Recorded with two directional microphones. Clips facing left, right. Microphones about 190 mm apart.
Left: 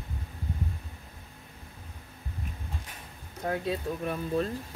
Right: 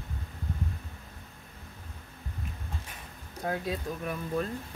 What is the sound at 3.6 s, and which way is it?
Speech, 30° left (ahead or behind).